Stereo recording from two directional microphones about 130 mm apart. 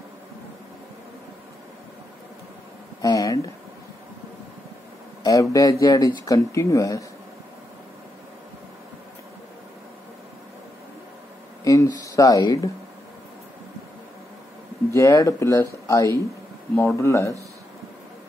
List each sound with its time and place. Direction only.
3.0 s a sound: 25° left (ahead or behind)
5.2 s speech: 25° left (ahead or behind)
11.6 s speech: 25° left (ahead or behind)
14.9 s speech: 25° left (ahead or behind)